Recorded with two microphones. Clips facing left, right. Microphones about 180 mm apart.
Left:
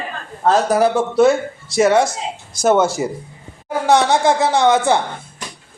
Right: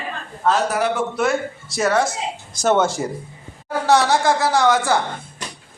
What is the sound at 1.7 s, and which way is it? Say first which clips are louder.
Speech: left 5 dB; 25° left (ahead or behind).